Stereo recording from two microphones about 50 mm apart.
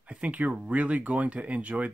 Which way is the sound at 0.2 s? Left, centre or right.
Right.